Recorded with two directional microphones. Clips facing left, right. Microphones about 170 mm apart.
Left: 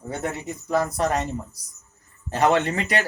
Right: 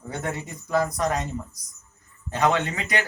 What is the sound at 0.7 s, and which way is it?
Speech, 30° left (ahead or behind).